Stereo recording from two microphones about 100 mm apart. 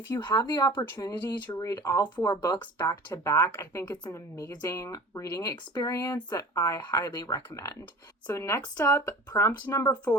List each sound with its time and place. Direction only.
0.1 s speech: 45° left (ahead or behind)
0.9 s speech: 25° left (ahead or behind)
1.5 s speech: 35° left (ahead or behind)